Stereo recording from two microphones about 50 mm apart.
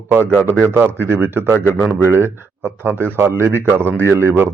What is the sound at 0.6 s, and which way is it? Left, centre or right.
Speech, right.